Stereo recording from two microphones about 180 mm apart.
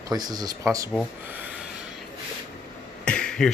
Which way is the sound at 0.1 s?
20° right (ahead or behind).